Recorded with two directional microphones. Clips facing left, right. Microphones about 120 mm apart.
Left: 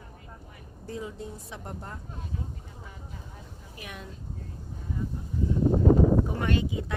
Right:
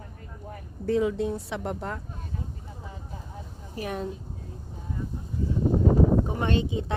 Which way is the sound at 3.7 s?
35° right (ahead or behind).